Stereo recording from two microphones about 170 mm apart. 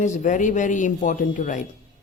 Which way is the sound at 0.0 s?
45° left (ahead or behind).